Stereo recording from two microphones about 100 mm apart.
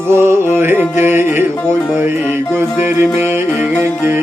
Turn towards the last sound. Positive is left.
turn(degrees=-20)  # may be behind; listen again after turning